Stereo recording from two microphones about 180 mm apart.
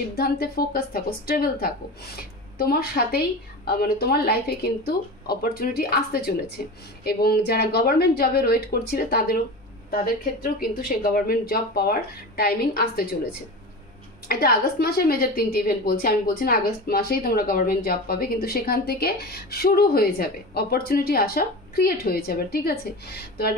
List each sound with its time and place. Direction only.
0.1 s a woman's voice: 60° left (ahead or behind)
14.2 s a woman's voice: 55° left (ahead or behind)